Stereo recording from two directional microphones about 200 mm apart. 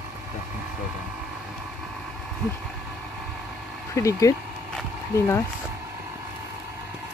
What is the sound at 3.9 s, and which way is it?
Speech, 15° left (ahead or behind).